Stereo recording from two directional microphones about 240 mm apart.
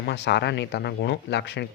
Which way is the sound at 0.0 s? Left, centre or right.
Left.